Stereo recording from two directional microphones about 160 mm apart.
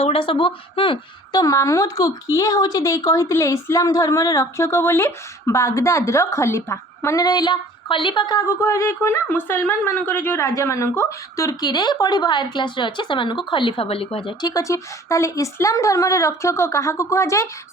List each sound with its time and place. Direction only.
0.0 s a woman's voice: 35° left (ahead or behind)
14.5 s a woman's voice: 20° left (ahead or behind)